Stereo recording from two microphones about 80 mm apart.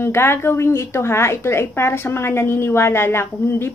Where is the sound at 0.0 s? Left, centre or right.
Left.